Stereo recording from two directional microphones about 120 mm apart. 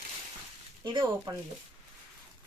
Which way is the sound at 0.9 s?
40° right (ahead or behind).